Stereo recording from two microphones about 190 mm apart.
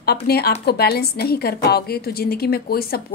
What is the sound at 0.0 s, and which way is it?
A woman's voice, 55° left (ahead or behind).